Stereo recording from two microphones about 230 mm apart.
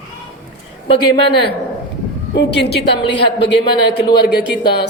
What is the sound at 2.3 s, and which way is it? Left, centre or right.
Speech, left.